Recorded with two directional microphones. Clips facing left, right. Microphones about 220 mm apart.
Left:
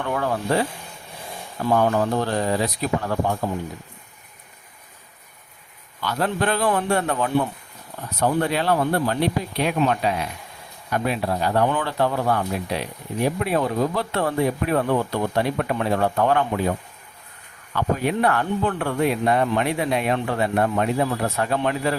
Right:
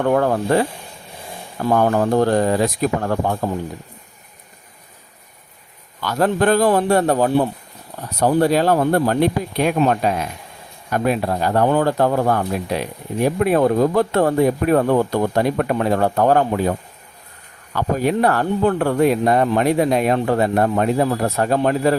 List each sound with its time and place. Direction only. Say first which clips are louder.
0.0 s speech: right 8 dB; 45° right (ahead or behind)
1.7 s speech: right 4 dB; 45° right (ahead or behind)
6.0 s speech: right 6 dB; 45° right (ahead or behind)
17.7 s speech: right 4 dB; 40° right (ahead or behind)